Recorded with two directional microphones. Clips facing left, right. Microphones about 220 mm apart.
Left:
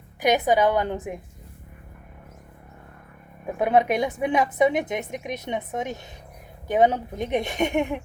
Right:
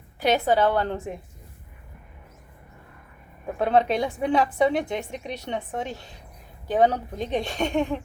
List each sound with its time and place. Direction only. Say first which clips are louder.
0.2 s a woman's voice: left 1 dB; 15° left (ahead or behind)
3.6 s a woman's voice: left 1 dB; 15° left (ahead or behind)